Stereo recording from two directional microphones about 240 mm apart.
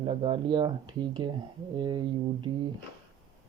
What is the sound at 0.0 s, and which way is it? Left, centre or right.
Speech, centre.